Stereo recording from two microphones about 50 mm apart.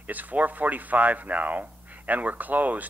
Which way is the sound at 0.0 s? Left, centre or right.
Right.